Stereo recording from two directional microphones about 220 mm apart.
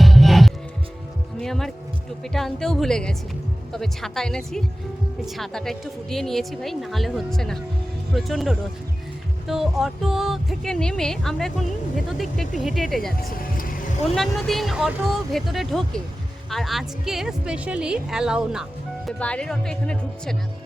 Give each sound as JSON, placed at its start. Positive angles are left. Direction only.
{"t": 0.0, "sound": "music", "side_deg": 0}
{"t": 2.2, "sound": "speech", "side_deg": 0}
{"t": 13.1, "sound": "speech", "side_deg": 40}
{"t": 14.2, "sound": "speech", "side_deg": 0}